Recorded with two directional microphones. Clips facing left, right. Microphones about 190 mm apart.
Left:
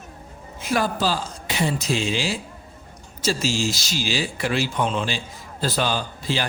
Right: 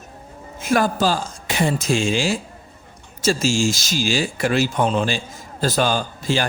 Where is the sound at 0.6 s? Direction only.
45° right (ahead or behind).